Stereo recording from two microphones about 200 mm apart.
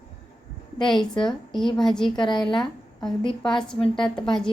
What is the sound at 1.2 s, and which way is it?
Speech, centre (ahead or behind).